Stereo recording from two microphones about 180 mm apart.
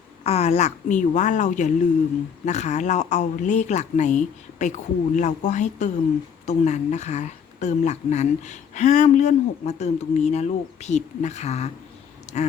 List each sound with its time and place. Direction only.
0.3 s a woman's voice: 35° left (ahead or behind)